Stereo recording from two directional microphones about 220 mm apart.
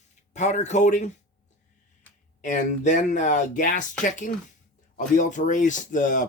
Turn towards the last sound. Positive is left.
turn(degrees=35)  # may be behind; listen again after turning